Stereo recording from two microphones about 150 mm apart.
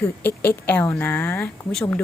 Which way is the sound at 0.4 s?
10° left (ahead or behind).